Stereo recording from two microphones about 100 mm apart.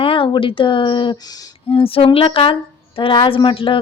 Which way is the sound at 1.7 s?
65° left (ahead or behind).